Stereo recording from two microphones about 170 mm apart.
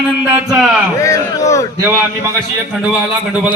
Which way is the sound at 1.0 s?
20° left (ahead or behind).